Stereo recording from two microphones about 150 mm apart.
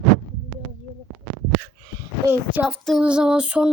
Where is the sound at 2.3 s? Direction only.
10° right (ahead or behind).